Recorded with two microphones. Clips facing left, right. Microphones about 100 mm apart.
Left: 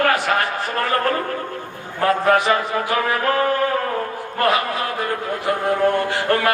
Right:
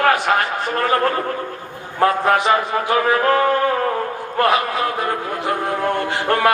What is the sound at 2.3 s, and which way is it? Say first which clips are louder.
Chant: right 1 dB; 20° right (ahead or behind).